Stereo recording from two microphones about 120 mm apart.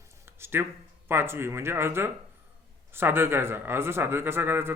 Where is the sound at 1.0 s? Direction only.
20° right (ahead or behind).